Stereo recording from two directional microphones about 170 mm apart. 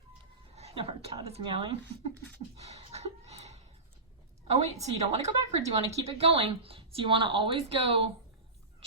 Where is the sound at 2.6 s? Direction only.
40° right (ahead or behind).